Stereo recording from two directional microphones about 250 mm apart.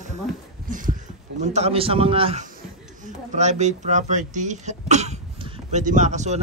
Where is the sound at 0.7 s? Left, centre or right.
Right.